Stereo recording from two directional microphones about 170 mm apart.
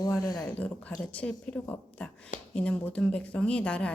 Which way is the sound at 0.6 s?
5° left (ahead or behind).